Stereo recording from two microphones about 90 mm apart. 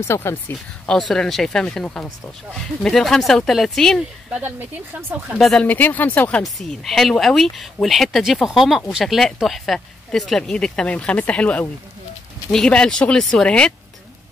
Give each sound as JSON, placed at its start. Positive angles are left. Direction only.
{"t": 0.0, "sound": "speech", "side_deg": 30}
{"t": 0.8, "sound": "speech", "side_deg": 5}
{"t": 4.4, "sound": "speech", "side_deg": -20}
{"t": 5.4, "sound": "speech", "side_deg": 5}
{"t": 5.7, "sound": "speech", "side_deg": 20}
{"t": 6.6, "sound": "speech", "side_deg": 5}